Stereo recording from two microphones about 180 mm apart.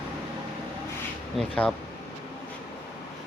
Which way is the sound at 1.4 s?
5° left (ahead or behind).